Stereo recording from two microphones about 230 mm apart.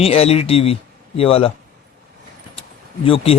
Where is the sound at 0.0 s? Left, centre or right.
Left.